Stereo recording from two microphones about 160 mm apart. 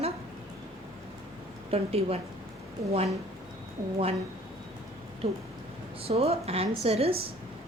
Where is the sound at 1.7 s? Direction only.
40° right (ahead or behind).